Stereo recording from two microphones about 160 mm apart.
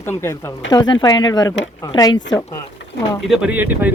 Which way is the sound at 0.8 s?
25° left (ahead or behind).